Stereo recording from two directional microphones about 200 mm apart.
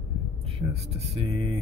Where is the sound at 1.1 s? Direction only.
30° right (ahead or behind).